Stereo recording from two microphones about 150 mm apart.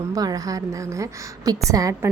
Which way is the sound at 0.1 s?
25° right (ahead or behind).